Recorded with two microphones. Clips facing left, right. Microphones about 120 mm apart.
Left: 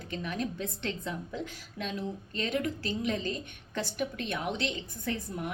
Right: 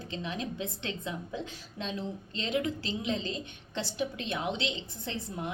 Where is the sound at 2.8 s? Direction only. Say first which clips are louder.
Left 2 dB; 50° left (ahead or behind).